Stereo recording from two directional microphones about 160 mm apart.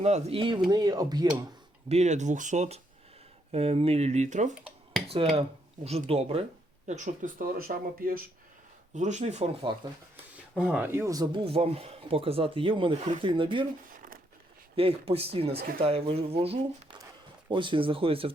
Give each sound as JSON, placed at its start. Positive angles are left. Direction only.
{"t": 0.0, "sound": "speech", "side_deg": -40}
{"t": 1.9, "sound": "speech", "side_deg": -45}
{"t": 9.0, "sound": "speech", "side_deg": -45}
{"t": 10.6, "sound": "speech", "side_deg": -5}
{"t": 13.9, "sound": "crumpling", "side_deg": -60}
{"t": 14.8, "sound": "speech", "side_deg": -35}